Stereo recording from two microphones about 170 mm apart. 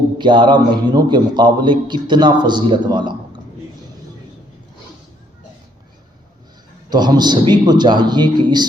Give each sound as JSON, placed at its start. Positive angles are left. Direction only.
{"t": 0.2, "sound": "a man's voice", "side_deg": -25}
{"t": 6.9, "sound": "a man's voice", "side_deg": -25}